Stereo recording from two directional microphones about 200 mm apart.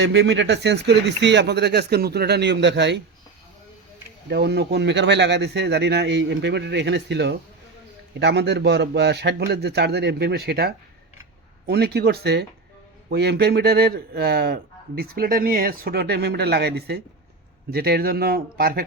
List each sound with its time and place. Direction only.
0.0 s speech: 60° right (ahead or behind)
4.3 s a man's voice: 55° right (ahead or behind)